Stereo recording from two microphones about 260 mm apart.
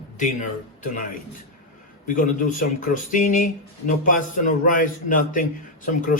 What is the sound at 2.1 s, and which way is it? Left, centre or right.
Speech, left.